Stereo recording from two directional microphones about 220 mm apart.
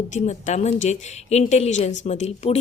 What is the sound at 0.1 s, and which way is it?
A woman's voice, 35° left (ahead or behind).